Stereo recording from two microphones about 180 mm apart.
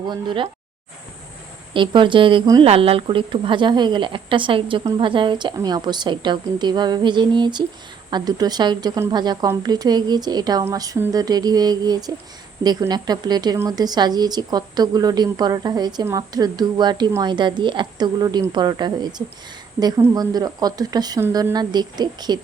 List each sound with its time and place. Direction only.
0.1 s a woman's voice: 25° right (ahead or behind)
1.7 s a woman's voice: 25° right (ahead or behind)